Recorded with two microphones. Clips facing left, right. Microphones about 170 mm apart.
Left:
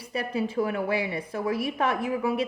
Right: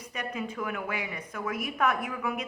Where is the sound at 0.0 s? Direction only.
30° left (ahead or behind).